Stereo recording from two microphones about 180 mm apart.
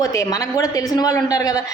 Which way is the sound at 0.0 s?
20° left (ahead or behind).